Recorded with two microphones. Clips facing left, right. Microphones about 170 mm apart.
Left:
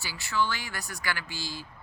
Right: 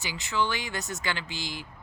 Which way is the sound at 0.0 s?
20° right (ahead or behind).